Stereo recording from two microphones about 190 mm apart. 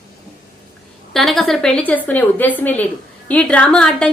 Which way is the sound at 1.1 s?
Centre (ahead or behind).